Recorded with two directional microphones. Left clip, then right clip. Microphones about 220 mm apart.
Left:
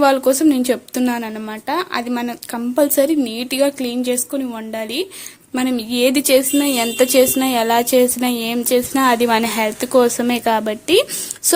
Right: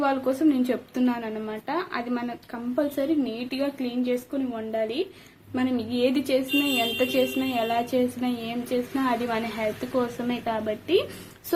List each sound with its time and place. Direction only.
0.0 s a woman's voice: 50° left (ahead or behind)